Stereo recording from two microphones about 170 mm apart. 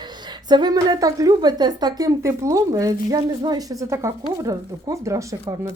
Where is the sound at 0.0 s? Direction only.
25° right (ahead or behind).